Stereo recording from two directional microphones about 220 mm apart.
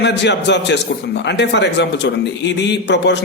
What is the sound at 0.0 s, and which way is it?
A man's voice, 50° left (ahead or behind).